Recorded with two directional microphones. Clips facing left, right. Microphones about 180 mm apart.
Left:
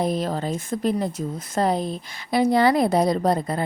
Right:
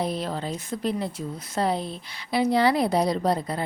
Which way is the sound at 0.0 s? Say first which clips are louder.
Left 4 dB; 45° left (ahead or behind).